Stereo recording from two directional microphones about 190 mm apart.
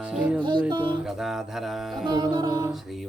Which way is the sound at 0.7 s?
25° right (ahead or behind).